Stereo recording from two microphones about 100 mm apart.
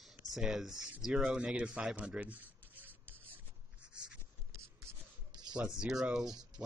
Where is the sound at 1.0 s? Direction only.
5° right (ahead or behind).